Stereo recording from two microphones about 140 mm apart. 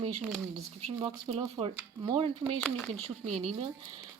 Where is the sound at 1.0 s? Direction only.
45° right (ahead or behind).